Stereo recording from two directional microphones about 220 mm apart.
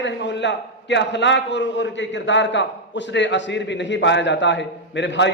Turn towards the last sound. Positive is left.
turn(degrees=55)  # may be behind; listen again after turning